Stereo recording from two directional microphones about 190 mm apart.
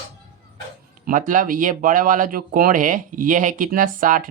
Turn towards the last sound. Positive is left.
turn(degrees=-45)  # may be behind; listen again after turning